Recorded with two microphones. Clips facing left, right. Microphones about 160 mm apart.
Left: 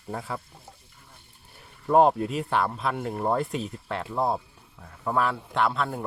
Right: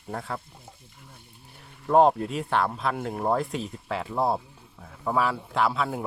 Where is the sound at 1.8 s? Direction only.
Centre (ahead or behind).